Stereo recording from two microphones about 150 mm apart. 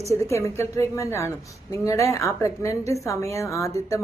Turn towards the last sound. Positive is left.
turn(degrees=20)  # may be behind; listen again after turning